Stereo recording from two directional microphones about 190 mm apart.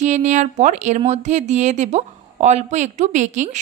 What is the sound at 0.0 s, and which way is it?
A woman's voice, 40° right (ahead or behind).